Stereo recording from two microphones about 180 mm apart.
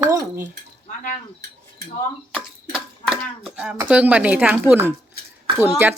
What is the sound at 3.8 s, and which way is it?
Speech, 5° right (ahead or behind).